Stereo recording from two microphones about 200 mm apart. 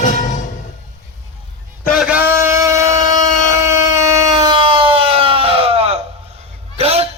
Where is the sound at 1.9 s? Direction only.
5° right (ahead or behind); by 7.0 s 30° right (ahead or behind).